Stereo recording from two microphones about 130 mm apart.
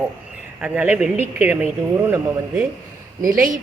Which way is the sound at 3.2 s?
90° right.